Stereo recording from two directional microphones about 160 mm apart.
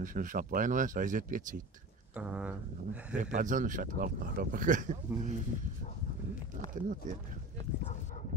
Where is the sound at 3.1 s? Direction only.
50° right (ahead or behind).